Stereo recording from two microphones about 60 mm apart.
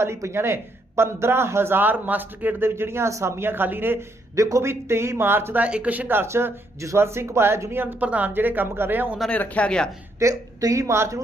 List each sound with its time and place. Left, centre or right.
0.0 s speech: right
2.6 s speech: right
3.1 s speech: right
4.4 s a woman's voice: right
4.6 s speech: right
5.5 s speech: right
6.2 s speech: right
8.0 s speech: right
8.3 s speech: right
9.3 s speech: left
10.2 s a woman's voice: right